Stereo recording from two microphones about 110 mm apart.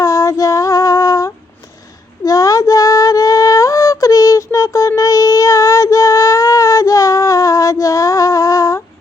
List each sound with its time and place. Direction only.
0.0 s female singing: 25° left (ahead or behind)